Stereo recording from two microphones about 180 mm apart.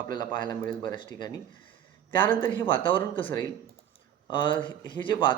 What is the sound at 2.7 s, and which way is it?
Speech, 30° left (ahead or behind).